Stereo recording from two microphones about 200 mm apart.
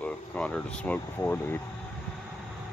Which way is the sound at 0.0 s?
5° left (ahead or behind).